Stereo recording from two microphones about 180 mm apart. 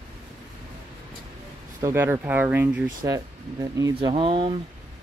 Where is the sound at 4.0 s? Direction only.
25° right (ahead or behind).